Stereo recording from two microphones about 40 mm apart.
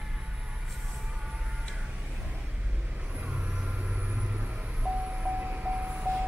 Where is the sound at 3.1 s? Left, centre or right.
Right.